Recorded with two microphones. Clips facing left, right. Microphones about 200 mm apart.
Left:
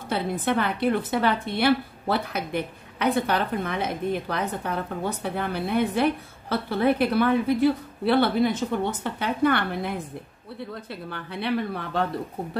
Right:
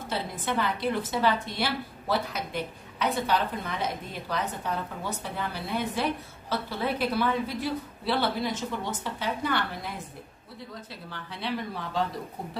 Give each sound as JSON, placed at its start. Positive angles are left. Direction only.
{"t": 0.1, "sound": "a woman's voice", "side_deg": 60}